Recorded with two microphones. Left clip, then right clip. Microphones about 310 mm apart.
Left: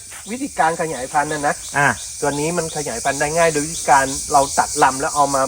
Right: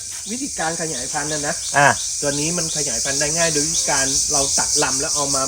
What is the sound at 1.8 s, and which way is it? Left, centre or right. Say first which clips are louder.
Speech: right 3 dB; right.